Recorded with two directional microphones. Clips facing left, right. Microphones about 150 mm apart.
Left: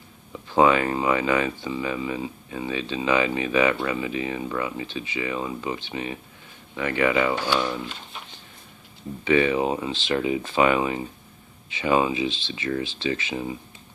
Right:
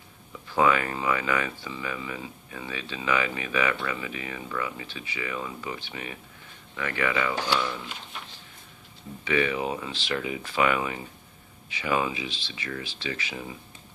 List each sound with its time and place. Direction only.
0.3 s speech: 25° left (ahead or behind)
9.2 s speech: 30° left (ahead or behind)